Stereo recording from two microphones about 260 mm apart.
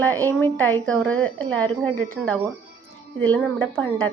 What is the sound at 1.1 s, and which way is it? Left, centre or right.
Speech, centre.